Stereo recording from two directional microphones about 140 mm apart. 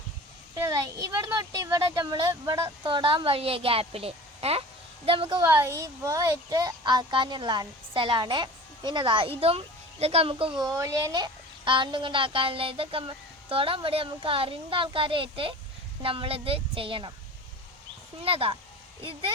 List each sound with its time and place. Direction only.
0.5 s a child's voice: 25° right (ahead or behind)
5.4 s a child's voice: 20° right (ahead or behind); by 10.6 s 40° right (ahead or behind)
10.6 s a child's voice: 25° right (ahead or behind); by 17.1 s 40° right (ahead or behind)
18.2 s speech: 40° right (ahead or behind)